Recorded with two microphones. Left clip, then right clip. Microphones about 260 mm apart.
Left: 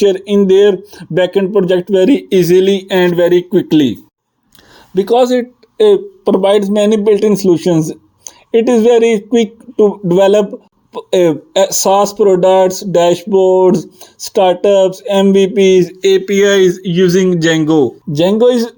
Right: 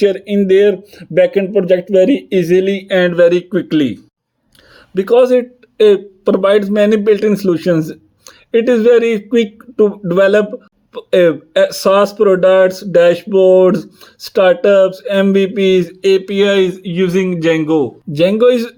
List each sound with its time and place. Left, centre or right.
0.0 s speech: centre
18.1 s speech: centre